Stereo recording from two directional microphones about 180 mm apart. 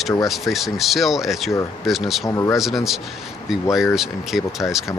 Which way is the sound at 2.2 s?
15° left (ahead or behind).